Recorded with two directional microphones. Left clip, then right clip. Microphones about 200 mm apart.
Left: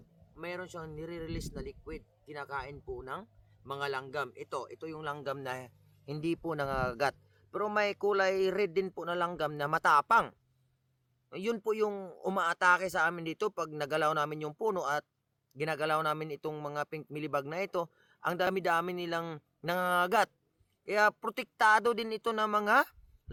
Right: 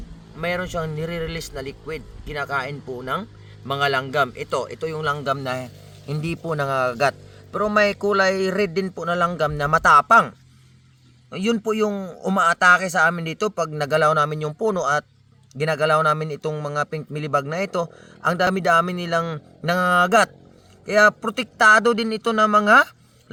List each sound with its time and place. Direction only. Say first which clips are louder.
0.3 s a man's voice: right 16 dB; 25° left (ahead or behind); by 22.9 s 45° left (ahead or behind)